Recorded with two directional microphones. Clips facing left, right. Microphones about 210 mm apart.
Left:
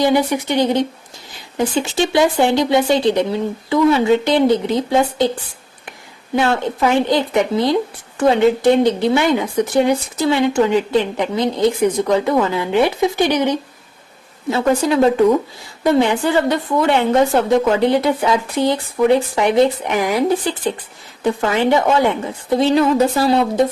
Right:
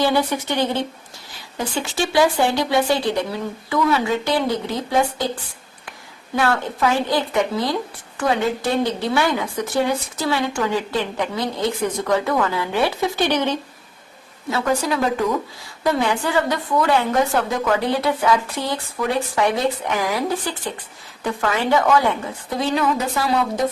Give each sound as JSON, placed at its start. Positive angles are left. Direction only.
{"t": 0.0, "sound": "speech", "side_deg": 15}
{"t": 6.3, "sound": "speech", "side_deg": 25}
{"t": 14.5, "sound": "a woman's voice", "side_deg": 25}